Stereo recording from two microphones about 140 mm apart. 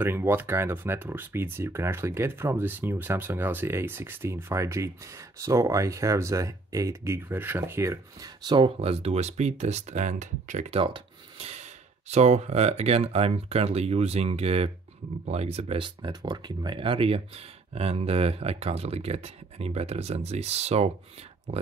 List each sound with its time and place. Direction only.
0.0 s speech: 15° right (ahead or behind)
8.5 s speech: 35° right (ahead or behind); by 10.8 s 60° right (ahead or behind)
10.8 s a sound: 40° right (ahead or behind)
12.1 s speech: 50° right (ahead or behind)